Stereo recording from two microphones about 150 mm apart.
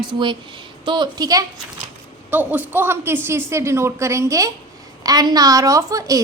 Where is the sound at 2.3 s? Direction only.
10° right (ahead or behind).